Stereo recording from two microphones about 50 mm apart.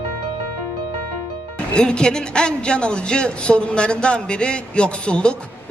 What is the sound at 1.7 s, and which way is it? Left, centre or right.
A man's voice, centre.